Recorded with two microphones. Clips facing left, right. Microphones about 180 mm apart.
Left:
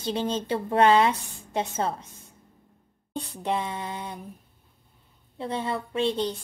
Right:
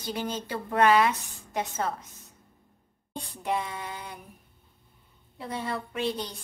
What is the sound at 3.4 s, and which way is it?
Speech, 30° left (ahead or behind).